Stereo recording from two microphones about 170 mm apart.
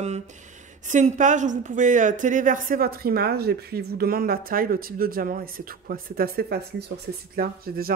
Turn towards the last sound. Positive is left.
turn(degrees=-60)  # may be behind; listen again after turning